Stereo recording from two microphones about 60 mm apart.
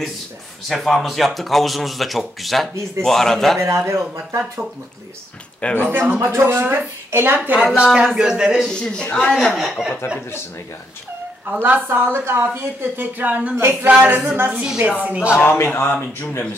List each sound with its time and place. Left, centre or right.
0.7 s speech: centre
3.5 s a man's voice: right
5.6 s a man's voice: left
5.9 s a woman's voice: right
7.7 s speech: centre
8.6 s speech: centre
9.6 s speech: centre
11.4 s speech: right
11.9 s speech: right
14.6 s speech: centre
15.4 s speech: left